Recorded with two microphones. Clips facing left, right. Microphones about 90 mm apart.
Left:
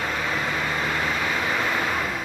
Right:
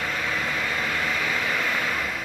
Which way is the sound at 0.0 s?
20° left (ahead or behind).